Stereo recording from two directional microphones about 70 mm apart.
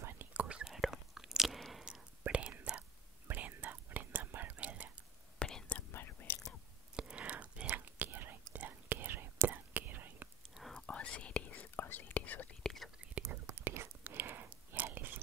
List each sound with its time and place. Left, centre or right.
0.3 s whispering: centre
0.7 s whispering: centre
1.6 s a sound: centre
2.2 s whispering: centre
5.5 s whispering: centre
5.9 s whispering: left
7.0 s whispering: centre
10.7 s whispering: centre
12.6 s whispering: centre
13.5 s whispering: right
14.0 s chewing: right